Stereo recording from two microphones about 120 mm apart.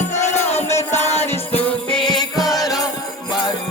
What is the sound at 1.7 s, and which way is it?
Music, 45° left (ahead or behind).